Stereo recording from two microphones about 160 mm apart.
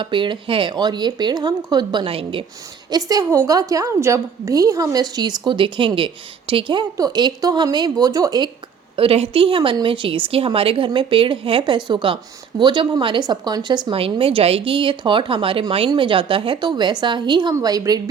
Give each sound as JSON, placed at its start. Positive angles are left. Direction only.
{"t": 0.0, "sound": "a woman's voice", "side_deg": -30}
{"t": 2.9, "sound": "a woman's voice", "side_deg": -25}
{"t": 9.0, "sound": "a woman's voice", "side_deg": -35}